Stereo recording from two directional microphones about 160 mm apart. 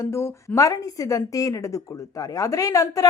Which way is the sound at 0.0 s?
15° left (ahead or behind).